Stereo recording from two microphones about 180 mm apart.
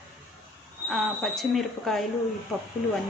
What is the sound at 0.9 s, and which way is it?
A woman's voice, centre (ahead or behind).